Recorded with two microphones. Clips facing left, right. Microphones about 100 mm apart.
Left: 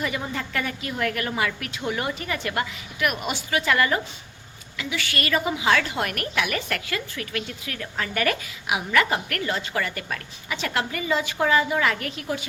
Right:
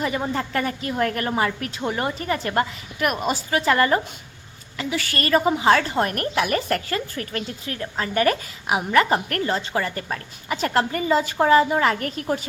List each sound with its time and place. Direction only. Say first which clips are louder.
0.0 s a woman's voice: right 4 dB; 35° right (ahead or behind)